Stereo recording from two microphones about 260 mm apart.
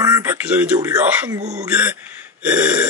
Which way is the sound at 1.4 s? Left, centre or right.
Right.